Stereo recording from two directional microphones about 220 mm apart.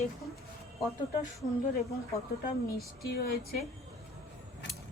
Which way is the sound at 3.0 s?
45° left (ahead or behind).